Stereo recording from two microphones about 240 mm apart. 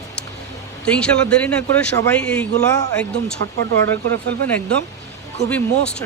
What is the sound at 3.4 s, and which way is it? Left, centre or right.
Speech, right.